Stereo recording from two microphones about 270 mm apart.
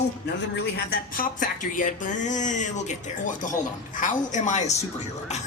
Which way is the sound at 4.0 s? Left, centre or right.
Left.